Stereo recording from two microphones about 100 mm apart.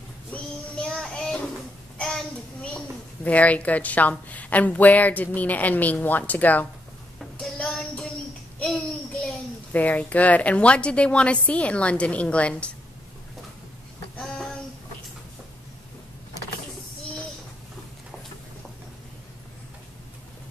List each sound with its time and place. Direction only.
0.3 s child singing: 10° left (ahead or behind)
2.0 s a sound: 10° left (ahead or behind)
3.3 s a woman's voice: 15° left (ahead or behind)
7.2 s child singing: 5° left (ahead or behind)
9.7 s a woman's voice: 15° left (ahead or behind)
14.2 s a sound: 5° left (ahead or behind)